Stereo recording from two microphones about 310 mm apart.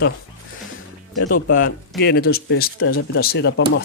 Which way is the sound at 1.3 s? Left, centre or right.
Left.